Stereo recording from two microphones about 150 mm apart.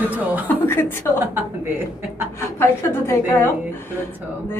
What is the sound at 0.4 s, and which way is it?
Speech, 15° left (ahead or behind).